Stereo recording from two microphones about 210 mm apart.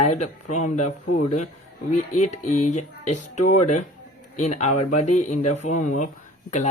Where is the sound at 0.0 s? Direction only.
35° left (ahead or behind).